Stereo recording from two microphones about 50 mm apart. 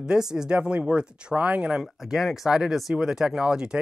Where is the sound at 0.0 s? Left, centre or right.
Centre.